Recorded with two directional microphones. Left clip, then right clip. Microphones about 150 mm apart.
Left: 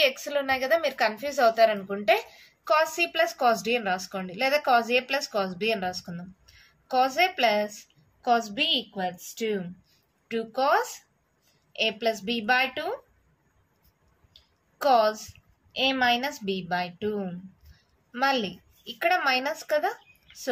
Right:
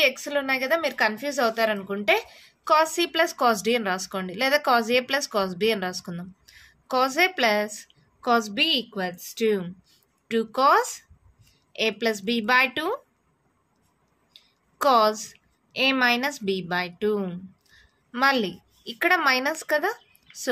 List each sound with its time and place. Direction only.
0.0 s a woman's voice: 35° right (ahead or behind); by 13.0 s 60° right (ahead or behind)
14.8 s a woman's voice: 60° right (ahead or behind)